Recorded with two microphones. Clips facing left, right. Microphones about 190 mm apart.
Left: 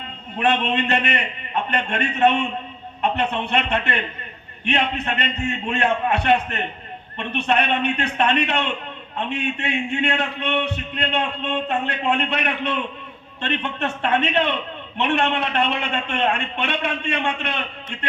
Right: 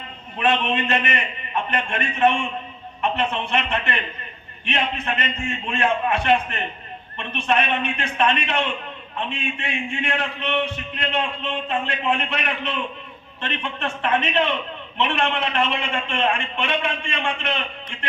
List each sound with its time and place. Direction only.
0.3 s a man's voice: 65° left (ahead or behind)